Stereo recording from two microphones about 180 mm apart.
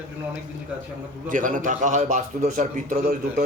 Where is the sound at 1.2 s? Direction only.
45° right (ahead or behind).